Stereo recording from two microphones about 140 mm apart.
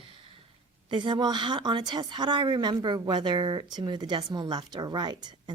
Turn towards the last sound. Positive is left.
turn(degrees=-30)  # may be behind; listen again after turning